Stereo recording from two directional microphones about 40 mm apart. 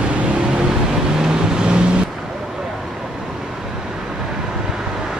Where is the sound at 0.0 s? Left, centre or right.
Right.